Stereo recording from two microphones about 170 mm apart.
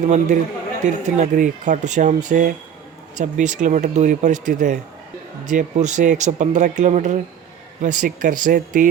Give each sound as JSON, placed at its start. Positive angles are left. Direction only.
{"t": 0.0, "sound": "speech", "side_deg": -45}